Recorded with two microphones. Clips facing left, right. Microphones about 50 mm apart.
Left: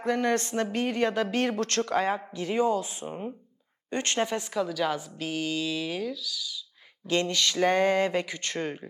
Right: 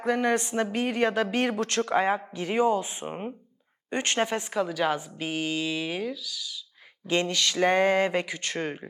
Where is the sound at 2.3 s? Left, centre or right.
Right.